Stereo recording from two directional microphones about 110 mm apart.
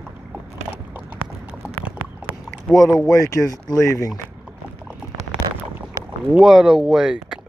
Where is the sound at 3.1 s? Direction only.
25° left (ahead or behind).